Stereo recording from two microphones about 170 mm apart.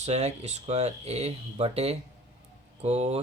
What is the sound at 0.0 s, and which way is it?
A man's voice, 40° right (ahead or behind).